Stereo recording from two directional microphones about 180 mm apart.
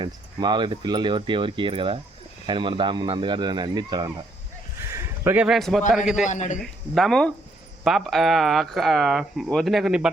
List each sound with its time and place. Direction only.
0.0 s speech: 25° right (ahead or behind)
4.9 s a sound: 15° right (ahead or behind)
5.9 s speech: 5° right (ahead or behind)
6.2 s a man's voice: 45° left (ahead or behind)
6.6 s speech: centre (ahead or behind)